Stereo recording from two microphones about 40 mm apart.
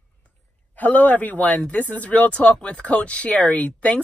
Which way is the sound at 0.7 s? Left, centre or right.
Left.